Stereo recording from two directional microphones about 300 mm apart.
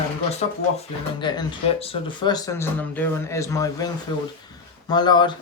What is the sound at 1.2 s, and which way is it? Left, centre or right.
Speech, centre.